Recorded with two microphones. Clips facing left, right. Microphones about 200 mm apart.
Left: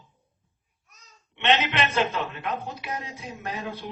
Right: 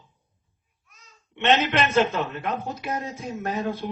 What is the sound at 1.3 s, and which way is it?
A man's voice, 45° right (ahead or behind).